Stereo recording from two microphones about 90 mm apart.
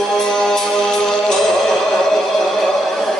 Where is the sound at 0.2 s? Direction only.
5° left (ahead or behind).